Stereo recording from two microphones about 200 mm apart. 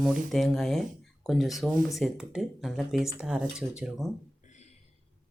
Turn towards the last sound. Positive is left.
turn(degrees=-5)  # may be behind; listen again after turning